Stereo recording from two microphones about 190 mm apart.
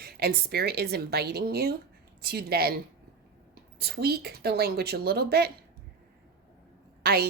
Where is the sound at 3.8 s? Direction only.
55° right (ahead or behind).